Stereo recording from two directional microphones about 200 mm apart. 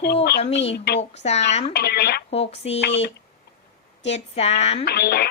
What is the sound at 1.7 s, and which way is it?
Speech, 55° left (ahead or behind).